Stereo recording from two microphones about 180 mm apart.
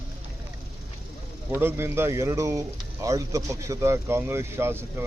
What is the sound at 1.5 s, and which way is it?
Speech, 15° right (ahead or behind).